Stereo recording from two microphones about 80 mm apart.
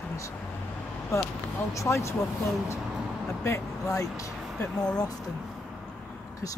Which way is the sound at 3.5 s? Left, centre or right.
Left.